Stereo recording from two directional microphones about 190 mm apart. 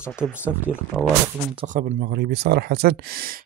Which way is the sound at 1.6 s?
45° right (ahead or behind).